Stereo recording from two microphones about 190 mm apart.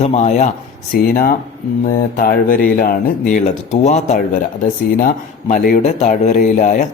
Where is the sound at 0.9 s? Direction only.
50° left (ahead or behind).